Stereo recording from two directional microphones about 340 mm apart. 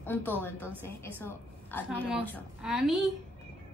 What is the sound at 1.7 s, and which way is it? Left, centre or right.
A woman's voice, centre.